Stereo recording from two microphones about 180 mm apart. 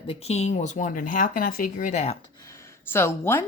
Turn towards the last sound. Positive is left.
turn(degrees=15)  # may be behind; listen again after turning